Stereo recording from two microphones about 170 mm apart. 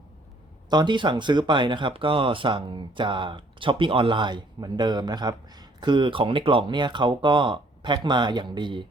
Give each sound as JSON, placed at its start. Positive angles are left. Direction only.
{"t": 0.7, "sound": "speech", "side_deg": -25}